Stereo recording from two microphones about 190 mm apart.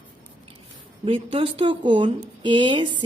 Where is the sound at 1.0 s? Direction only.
30° right (ahead or behind).